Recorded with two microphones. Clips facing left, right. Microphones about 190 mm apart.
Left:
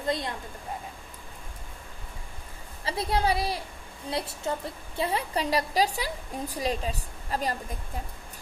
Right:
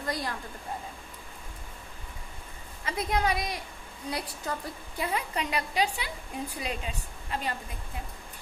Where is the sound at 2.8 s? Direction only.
30° left (ahead or behind).